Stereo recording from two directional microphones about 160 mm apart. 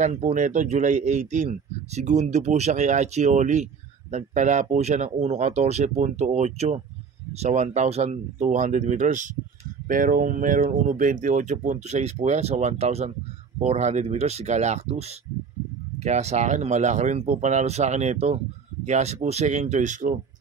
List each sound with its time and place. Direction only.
0.0 s speech: 45° right (ahead or behind)